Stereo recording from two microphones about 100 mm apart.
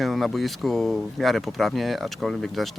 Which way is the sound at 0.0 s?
Centre (ahead or behind).